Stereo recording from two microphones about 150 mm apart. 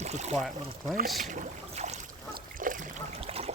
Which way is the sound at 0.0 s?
45° right (ahead or behind).